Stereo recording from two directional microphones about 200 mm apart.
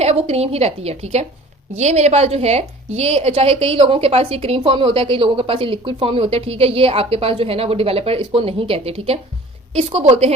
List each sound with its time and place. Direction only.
0.0 s a woman's voice: 30° right (ahead or behind)